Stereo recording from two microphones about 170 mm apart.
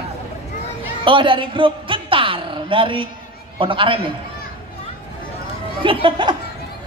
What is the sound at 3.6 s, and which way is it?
Speech, 30° right (ahead or behind).